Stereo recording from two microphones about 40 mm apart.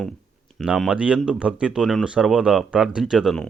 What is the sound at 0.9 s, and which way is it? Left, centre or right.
Speech, right.